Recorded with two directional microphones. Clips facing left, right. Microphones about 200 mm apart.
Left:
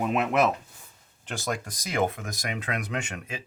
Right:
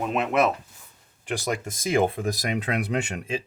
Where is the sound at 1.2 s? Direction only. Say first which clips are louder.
Right 4 dB; 15° right (ahead or behind).